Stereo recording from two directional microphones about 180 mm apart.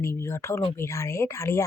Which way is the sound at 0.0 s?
15° left (ahead or behind).